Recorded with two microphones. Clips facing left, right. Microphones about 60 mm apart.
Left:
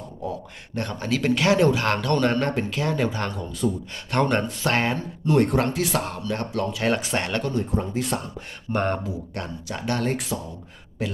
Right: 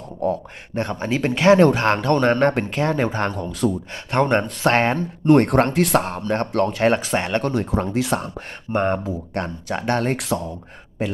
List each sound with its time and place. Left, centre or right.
0.2 s speech: right
0.8 s speech: right
1.9 s speech: right
4.1 s speech: right
6.0 s speech: right
6.8 s speech: right
7.5 s speech: right
8.7 s speech: centre
9.0 s speech: right
10.2 s speech: right